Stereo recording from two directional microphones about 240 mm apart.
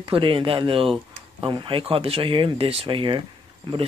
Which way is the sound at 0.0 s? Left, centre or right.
Right.